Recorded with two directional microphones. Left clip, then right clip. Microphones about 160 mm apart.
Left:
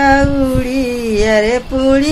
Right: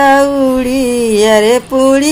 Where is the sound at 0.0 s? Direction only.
35° right (ahead or behind).